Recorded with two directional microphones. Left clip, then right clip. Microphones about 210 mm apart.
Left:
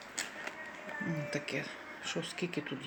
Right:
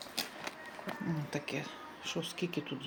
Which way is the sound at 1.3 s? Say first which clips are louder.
Left 2 dB; 10° right (ahead or behind).